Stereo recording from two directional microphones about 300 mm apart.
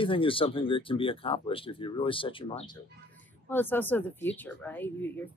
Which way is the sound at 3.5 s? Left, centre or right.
Centre.